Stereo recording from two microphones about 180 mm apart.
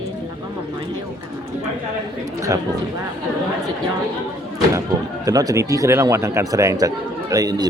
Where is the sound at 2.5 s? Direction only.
15° right (ahead or behind).